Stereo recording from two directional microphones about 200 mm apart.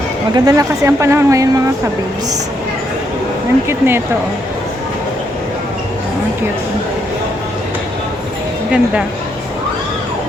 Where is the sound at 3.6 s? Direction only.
10° right (ahead or behind).